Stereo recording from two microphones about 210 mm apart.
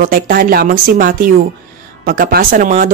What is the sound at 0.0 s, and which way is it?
Speech, 40° right (ahead or behind).